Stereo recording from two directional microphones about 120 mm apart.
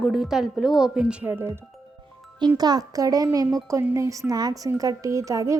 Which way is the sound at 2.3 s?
35° right (ahead or behind).